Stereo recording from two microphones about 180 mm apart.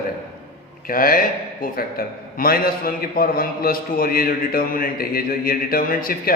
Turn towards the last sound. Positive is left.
turn(degrees=50)  # may be behind; listen again after turning